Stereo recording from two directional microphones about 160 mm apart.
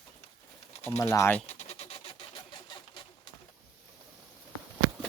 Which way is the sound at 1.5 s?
40° left (ahead or behind).